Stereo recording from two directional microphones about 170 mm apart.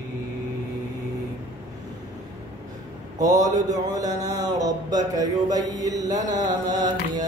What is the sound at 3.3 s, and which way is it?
Mantra, 45° right (ahead or behind).